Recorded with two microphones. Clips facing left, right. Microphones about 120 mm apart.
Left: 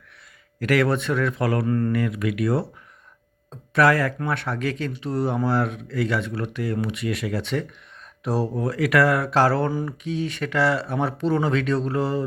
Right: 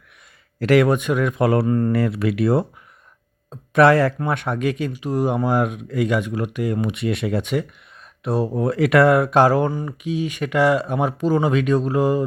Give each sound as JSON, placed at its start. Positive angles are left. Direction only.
{"t": 0.6, "sound": "a man's voice", "side_deg": -20}
{"t": 1.9, "sound": "speech", "side_deg": -30}
{"t": 3.8, "sound": "a man's voice", "side_deg": -25}
{"t": 7.4, "sound": "speech", "side_deg": -10}
{"t": 8.5, "sound": "a man's voice", "side_deg": -25}